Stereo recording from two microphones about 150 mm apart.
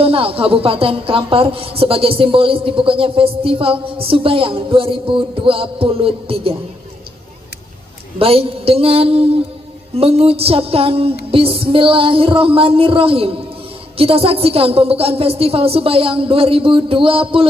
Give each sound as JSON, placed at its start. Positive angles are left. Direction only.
{"t": 0.0, "sound": "a woman's voice", "side_deg": -40}
{"t": 8.2, "sound": "a woman's voice", "side_deg": -40}
{"t": 11.2, "sound": "music", "side_deg": -40}
{"t": 11.7, "sound": "a woman's voice", "side_deg": -35}